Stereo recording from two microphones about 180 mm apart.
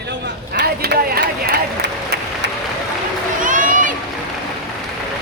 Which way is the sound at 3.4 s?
45° right (ahead or behind).